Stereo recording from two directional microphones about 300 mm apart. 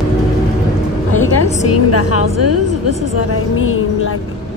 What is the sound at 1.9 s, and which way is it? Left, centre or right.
A woman's voice, left.